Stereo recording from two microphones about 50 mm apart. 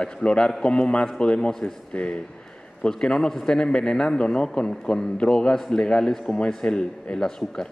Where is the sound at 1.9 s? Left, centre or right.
Left.